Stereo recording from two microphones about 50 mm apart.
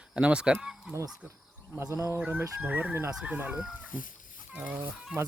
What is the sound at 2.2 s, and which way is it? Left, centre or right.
Speech, right.